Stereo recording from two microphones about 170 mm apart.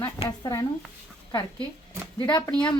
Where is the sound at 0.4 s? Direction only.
20° left (ahead or behind).